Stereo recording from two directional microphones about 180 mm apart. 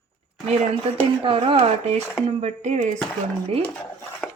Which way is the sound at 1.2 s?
30° right (ahead or behind).